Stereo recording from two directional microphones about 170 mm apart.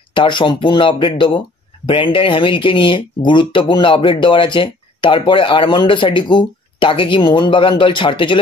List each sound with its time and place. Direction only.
0.1 s speech: 25° left (ahead or behind)